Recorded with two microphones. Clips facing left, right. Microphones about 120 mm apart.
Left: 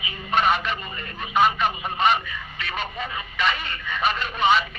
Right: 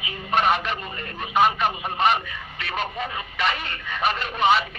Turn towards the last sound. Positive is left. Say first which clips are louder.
# even
turn(degrees=-60)  # may be behind; listen again after turning